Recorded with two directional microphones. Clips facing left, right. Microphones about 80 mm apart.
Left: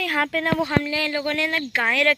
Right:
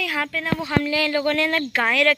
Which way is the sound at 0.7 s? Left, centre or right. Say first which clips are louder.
Right 2 dB; left.